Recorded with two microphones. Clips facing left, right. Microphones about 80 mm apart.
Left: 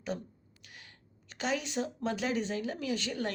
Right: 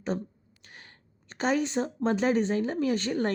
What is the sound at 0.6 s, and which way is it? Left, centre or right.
Speech, right.